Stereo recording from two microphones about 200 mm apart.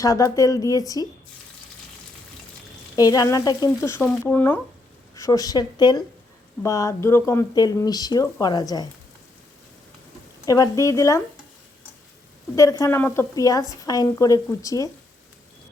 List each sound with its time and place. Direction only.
0.0 s speech: 15° left (ahead or behind)
2.9 s speech: 20° left (ahead or behind)
10.4 s speech: 15° left (ahead or behind)
12.8 s speech: 10° left (ahead or behind)